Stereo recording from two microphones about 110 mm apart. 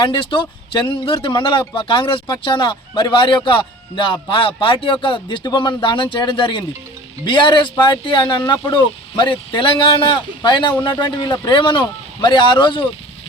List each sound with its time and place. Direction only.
0.0 s speech: 50° left (ahead or behind)